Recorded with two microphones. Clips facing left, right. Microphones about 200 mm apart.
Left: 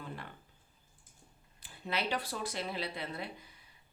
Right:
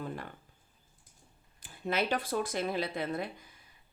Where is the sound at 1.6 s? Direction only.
50° right (ahead or behind).